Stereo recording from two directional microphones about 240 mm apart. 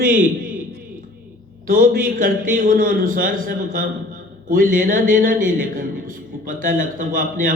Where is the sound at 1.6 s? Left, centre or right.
Right.